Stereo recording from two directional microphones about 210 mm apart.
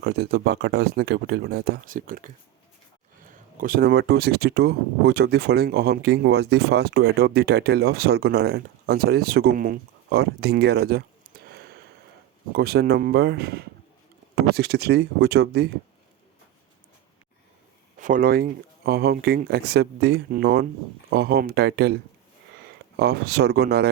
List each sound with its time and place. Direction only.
0.0 s speech: 50° right (ahead or behind)
3.6 s speech: 45° right (ahead or behind)
18.0 s speech: 40° right (ahead or behind)
23.0 s speech: 50° right (ahead or behind)